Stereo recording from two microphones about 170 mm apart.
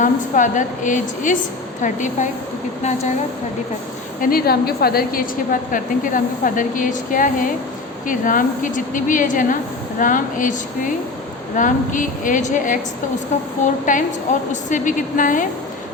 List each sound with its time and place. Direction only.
0.0 s a woman's voice: 50° left (ahead or behind)
4.2 s a woman's voice: 60° left (ahead or behind)